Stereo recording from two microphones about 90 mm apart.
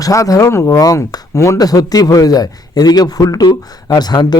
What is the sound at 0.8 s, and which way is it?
Speech, 45° left (ahead or behind).